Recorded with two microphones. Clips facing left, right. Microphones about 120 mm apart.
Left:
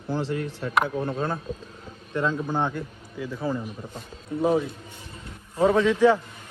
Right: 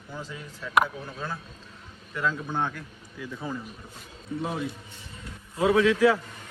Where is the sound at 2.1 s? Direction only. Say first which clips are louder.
Left 4 dB; 25° left (ahead or behind).